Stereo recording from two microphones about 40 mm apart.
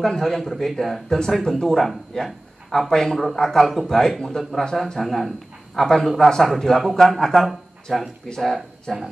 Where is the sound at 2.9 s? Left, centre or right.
Centre.